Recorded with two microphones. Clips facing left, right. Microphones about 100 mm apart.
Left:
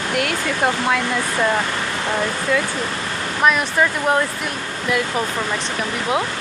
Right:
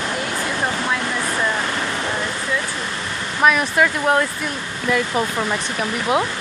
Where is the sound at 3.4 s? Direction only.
5° right (ahead or behind).